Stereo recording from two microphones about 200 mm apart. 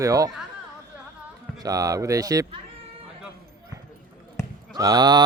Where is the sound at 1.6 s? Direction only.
15° right (ahead or behind).